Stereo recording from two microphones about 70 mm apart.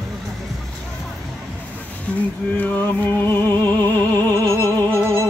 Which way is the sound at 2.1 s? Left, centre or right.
Left.